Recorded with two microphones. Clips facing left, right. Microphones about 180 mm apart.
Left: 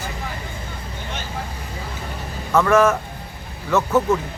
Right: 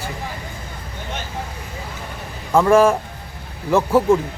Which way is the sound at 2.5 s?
30° right (ahead or behind).